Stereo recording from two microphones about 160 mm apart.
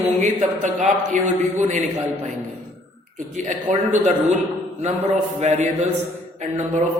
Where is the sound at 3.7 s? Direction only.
55° right (ahead or behind).